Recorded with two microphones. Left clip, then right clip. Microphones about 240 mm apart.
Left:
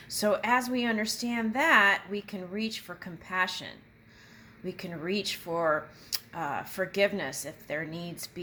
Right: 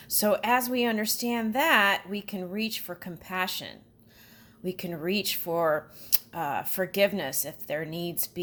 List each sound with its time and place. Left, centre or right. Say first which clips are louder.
0.2 s speech: right 2 dB; right